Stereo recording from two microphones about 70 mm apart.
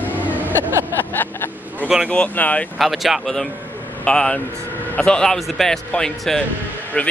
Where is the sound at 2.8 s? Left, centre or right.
Centre.